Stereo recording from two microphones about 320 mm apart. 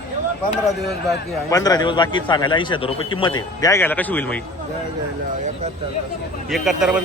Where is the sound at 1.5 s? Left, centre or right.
Centre.